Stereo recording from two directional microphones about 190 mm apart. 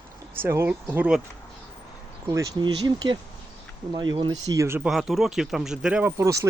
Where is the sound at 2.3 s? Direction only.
20° right (ahead or behind).